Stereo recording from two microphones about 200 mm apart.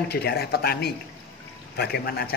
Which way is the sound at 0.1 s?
55° left (ahead or behind).